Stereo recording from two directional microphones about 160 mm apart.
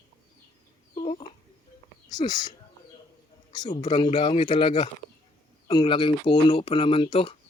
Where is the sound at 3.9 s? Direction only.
30° left (ahead or behind).